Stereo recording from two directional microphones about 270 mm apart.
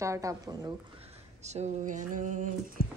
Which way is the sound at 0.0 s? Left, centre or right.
Centre.